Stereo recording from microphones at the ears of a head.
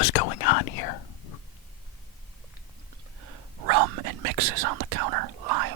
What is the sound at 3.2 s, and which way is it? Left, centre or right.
Whispering, right.